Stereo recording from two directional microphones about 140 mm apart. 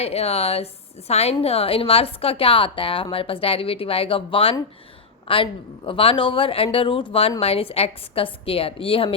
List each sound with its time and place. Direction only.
0.0 s a woman's voice: 50° left (ahead or behind)